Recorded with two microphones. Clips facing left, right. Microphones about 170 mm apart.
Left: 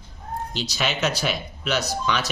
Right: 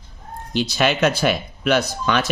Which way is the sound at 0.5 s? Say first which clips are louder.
Right 9 dB; 55° right (ahead or behind).